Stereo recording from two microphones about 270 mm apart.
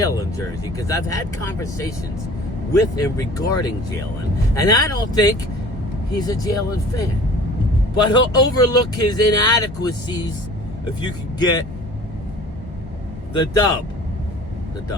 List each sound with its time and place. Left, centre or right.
0.0 s speech: centre
7.9 s speech: centre
13.3 s speech: centre